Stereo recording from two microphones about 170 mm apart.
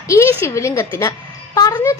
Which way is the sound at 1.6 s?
20° left (ahead or behind).